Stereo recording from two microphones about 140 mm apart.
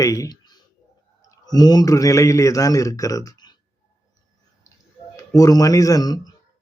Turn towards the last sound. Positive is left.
turn(degrees=25)  # may be behind; listen again after turning